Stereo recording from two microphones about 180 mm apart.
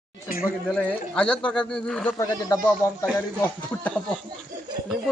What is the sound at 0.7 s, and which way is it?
Speech, 10° left (ahead or behind).